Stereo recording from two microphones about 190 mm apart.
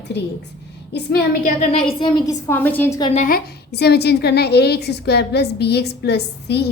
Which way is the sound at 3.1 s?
45° left (ahead or behind).